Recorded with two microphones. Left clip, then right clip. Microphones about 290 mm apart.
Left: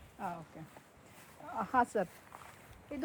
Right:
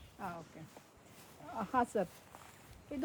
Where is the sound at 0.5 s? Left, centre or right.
Centre.